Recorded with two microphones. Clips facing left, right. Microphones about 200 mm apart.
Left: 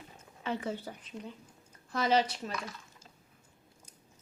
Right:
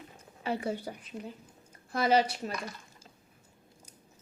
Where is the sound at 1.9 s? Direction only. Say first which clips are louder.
Right 2 dB; 10° right (ahead or behind).